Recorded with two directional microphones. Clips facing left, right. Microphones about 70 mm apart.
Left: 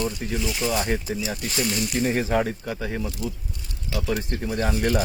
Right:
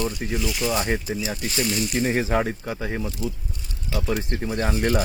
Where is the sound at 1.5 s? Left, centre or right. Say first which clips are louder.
Right 1 dB; left.